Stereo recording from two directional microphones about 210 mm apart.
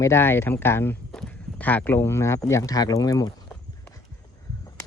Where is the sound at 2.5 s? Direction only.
15° left (ahead or behind).